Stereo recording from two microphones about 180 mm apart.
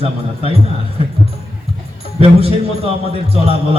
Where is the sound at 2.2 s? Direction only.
35° right (ahead or behind).